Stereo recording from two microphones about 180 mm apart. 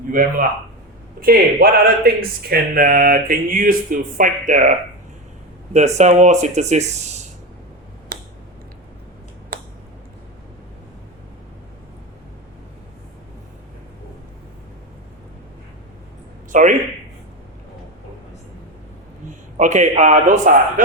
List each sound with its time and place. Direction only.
0.1 s speech: 50° right (ahead or behind)
8.1 s finger snapping: 50° right (ahead or behind)
16.5 s a sound: 45° right (ahead or behind)
19.3 s a man's voice: 45° right (ahead or behind)